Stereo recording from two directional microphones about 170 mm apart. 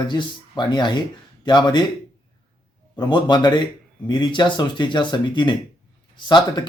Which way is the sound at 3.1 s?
25° left (ahead or behind).